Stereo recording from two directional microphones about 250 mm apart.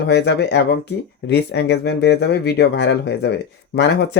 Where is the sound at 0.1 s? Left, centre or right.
Left.